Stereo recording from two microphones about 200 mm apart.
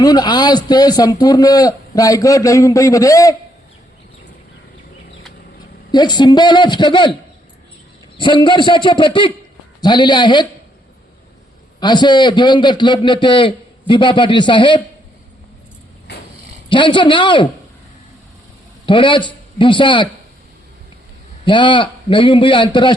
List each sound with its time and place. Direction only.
0.0 s a man's voice: 20° left (ahead or behind)
5.9 s a man's voice: 20° left (ahead or behind)
8.2 s a man's voice: 20° left (ahead or behind)
11.8 s a man's voice: 20° left (ahead or behind)
16.6 s a man's voice: 25° left (ahead or behind)
18.9 s a man's voice: 25° left (ahead or behind)
21.4 s a man's voice: 25° left (ahead or behind)